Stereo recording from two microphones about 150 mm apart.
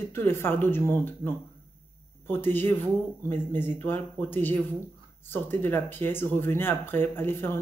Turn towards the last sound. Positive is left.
turn(degrees=15)  # may be behind; listen again after turning